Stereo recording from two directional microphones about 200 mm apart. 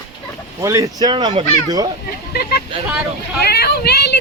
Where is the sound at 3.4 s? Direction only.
55° left (ahead or behind).